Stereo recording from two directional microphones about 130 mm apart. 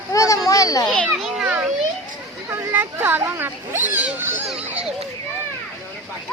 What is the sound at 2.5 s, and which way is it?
Speech, 20° right (ahead or behind).